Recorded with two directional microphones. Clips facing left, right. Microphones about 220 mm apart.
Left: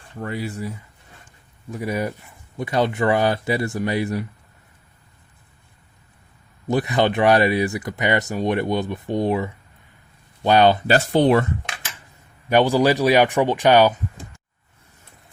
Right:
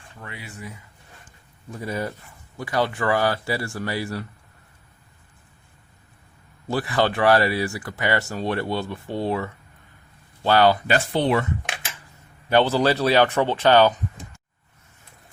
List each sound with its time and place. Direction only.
0.2 s speech: 40° left (ahead or behind)
1.7 s a man's voice: 15° left (ahead or behind)
6.7 s speech: 20° left (ahead or behind)
10.8 s speech: 40° left (ahead or behind)
12.5 s a man's voice: 15° left (ahead or behind)